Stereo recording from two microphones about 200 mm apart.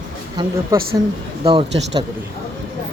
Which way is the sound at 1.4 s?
25° right (ahead or behind).